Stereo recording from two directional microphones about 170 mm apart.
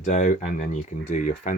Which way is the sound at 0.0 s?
45° left (ahead or behind).